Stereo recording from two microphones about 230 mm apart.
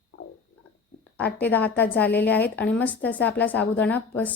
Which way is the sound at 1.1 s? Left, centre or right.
Centre.